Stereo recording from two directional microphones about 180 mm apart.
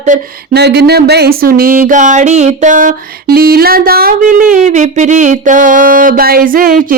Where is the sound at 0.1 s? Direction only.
45° right (ahead or behind).